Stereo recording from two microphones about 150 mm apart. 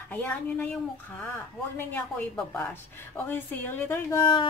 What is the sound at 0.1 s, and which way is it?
Speech, 10° left (ahead or behind).